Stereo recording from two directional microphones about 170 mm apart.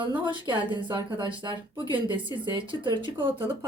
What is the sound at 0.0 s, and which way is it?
Speech, 30° right (ahead or behind).